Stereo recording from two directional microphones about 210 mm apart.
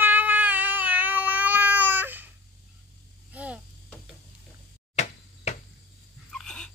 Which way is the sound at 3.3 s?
5° right (ahead or behind).